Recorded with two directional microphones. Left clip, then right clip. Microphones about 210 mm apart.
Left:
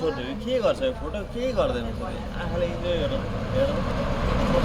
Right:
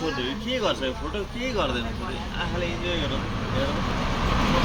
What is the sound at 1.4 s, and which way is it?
Speech, 60° left (ahead or behind).